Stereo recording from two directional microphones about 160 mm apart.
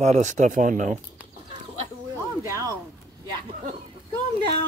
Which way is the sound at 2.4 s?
20° right (ahead or behind).